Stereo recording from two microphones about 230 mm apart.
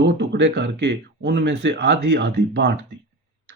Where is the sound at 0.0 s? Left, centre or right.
Right.